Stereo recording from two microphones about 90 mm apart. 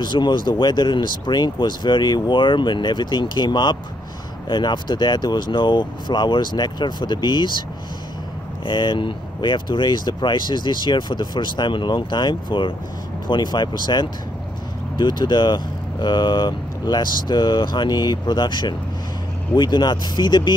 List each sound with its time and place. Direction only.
0.0 s speech: 55° left (ahead or behind)
8.6 s speech: 60° left (ahead or behind)